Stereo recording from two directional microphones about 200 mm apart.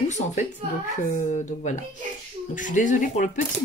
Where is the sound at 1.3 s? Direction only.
35° left (ahead or behind).